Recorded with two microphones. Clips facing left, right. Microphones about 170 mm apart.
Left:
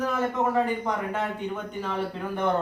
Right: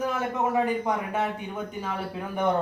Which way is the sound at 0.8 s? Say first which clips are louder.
Right 1 dB; 10° right (ahead or behind).